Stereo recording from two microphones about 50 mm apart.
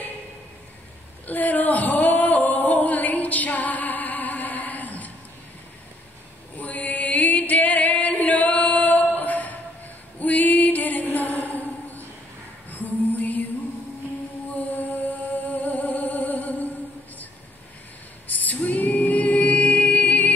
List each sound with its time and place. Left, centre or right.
1.2 s male singing: left
6.6 s chant: left
9.1 s a sound: left
10.1 s music: left
14.5 s music: left
18.3 s music: left